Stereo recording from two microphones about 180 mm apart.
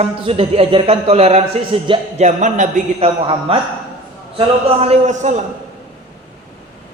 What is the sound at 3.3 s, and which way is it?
A man's voice, 30° right (ahead or behind).